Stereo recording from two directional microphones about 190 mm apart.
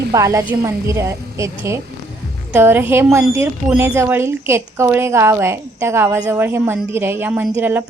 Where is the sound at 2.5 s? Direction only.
10° right (ahead or behind).